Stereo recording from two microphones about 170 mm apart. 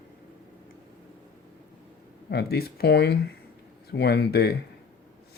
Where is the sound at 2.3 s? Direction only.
65° left (ahead or behind).